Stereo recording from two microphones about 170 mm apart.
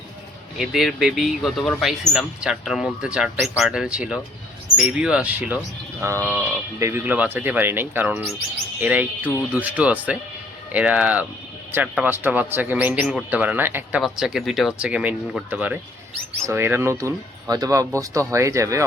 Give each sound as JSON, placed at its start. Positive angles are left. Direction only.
{"t": 0.5, "sound": "speech", "side_deg": 0}